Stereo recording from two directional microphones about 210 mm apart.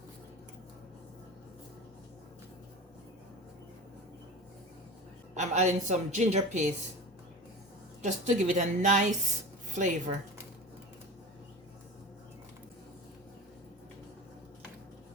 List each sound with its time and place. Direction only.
5.3 s a woman's voice: 35° right (ahead or behind)
8.0 s a woman's voice: 35° right (ahead or behind)